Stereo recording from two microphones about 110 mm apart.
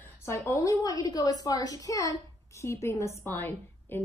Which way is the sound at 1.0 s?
35° left (ahead or behind).